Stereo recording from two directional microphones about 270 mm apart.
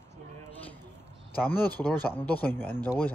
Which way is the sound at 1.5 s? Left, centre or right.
Centre.